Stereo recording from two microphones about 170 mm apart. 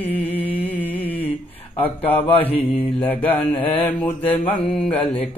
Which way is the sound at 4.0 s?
30° left (ahead or behind).